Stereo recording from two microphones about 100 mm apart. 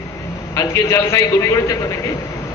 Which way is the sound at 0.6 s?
35° left (ahead or behind).